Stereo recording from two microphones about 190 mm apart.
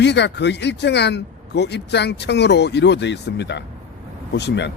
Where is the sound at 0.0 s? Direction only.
65° left (ahead or behind).